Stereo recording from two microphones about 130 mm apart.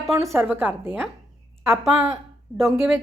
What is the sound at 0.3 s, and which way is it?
Speech, centre (ahead or behind).